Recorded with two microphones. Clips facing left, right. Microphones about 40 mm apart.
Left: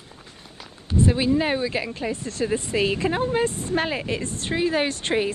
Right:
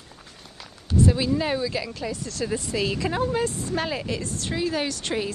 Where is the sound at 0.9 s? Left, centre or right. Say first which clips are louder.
Left 1 dB; left.